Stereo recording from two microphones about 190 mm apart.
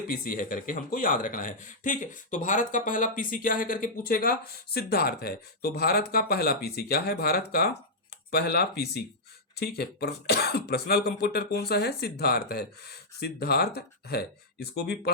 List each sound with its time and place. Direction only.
0.1 s speech: 45° left (ahead or behind)